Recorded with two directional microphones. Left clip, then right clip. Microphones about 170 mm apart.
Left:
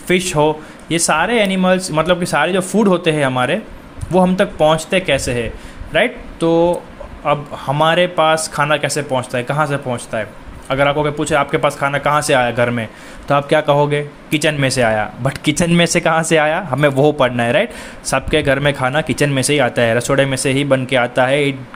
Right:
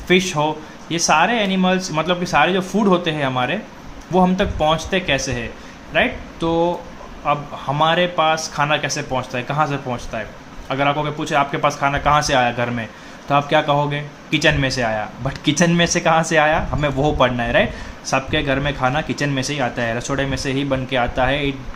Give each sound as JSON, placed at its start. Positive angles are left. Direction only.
{"t": 0.1, "sound": "speech", "side_deg": 35}